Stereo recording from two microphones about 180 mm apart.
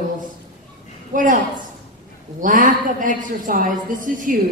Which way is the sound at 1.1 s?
45° right (ahead or behind).